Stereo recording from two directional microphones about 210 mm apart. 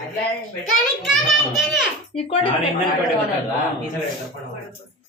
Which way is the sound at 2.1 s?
25° left (ahead or behind).